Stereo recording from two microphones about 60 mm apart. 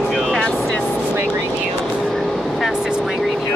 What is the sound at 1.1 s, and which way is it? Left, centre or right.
Vehicle, right.